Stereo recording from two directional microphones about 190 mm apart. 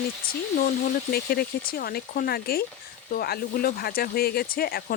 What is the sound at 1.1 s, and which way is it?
Speech, 55° left (ahead or behind).